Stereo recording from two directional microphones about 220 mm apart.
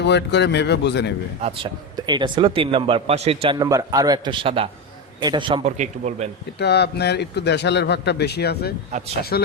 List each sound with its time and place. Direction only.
0.0 s a man's voice: 50° left (ahead or behind)
1.4 s a man's voice: 25° right (ahead or behind)
5.7 s a man's voice: 30° right (ahead or behind)
6.6 s a man's voice: 50° left (ahead or behind)